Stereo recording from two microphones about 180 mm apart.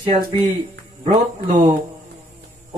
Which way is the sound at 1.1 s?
35° right (ahead or behind).